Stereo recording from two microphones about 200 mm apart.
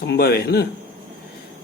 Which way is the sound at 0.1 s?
50° left (ahead or behind).